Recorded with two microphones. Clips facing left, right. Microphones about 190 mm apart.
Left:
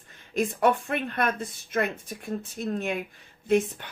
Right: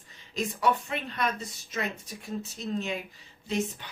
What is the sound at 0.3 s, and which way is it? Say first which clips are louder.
A woman's voice: left 4 dB; 55° left (ahead or behind).